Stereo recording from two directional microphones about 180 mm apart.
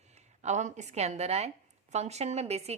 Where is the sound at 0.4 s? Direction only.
40° right (ahead or behind).